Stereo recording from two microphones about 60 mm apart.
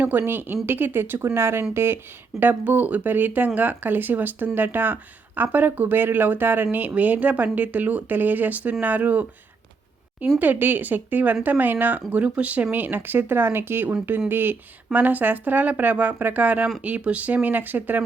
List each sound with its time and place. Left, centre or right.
0.2 s speech: right
2.4 s speech: right